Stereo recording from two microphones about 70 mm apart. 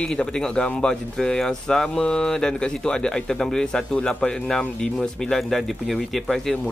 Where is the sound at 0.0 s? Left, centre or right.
Centre.